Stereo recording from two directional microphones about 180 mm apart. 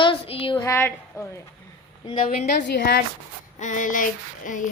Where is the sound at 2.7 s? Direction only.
70° left (ahead or behind).